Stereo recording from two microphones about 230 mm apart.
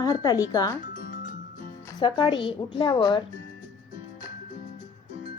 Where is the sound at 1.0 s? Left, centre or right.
Left.